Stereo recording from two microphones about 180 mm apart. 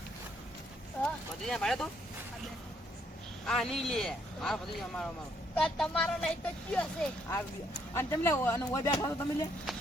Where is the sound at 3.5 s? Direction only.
Centre (ahead or behind).